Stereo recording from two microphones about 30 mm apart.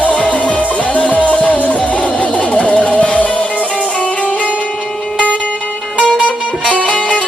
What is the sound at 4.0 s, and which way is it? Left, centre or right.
Music, left.